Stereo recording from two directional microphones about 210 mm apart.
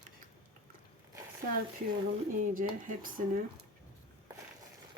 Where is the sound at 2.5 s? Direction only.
40° right (ahead or behind).